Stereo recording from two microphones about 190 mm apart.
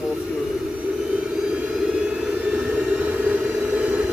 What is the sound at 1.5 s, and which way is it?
Vehicle, 5° right (ahead or behind).